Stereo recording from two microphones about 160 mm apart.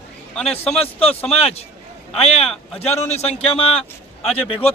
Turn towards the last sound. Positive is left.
turn(degrees=40)  # may be behind; listen again after turning